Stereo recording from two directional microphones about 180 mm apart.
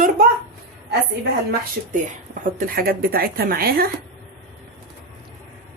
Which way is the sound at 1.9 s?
45° right (ahead or behind).